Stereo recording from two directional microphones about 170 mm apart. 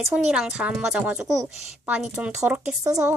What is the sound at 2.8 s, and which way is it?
Speech, 20° right (ahead or behind).